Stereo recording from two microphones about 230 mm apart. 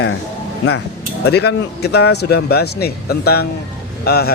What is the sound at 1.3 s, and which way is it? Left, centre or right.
Speech, left.